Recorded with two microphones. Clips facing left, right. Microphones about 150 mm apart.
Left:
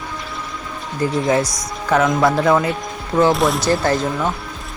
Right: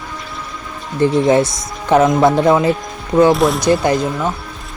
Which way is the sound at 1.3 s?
25° right (ahead or behind).